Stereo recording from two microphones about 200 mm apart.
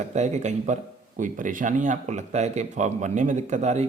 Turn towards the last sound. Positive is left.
turn(degrees=-35)  # may be behind; listen again after turning